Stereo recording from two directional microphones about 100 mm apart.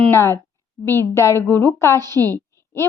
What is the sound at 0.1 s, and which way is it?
A woman's voice, 30° left (ahead or behind).